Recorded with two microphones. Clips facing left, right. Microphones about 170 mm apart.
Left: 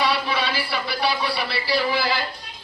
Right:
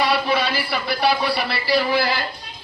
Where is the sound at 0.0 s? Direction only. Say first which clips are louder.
Right 3 dB; 45° right (ahead or behind).